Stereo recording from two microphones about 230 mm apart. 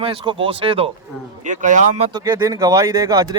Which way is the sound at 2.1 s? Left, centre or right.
Centre.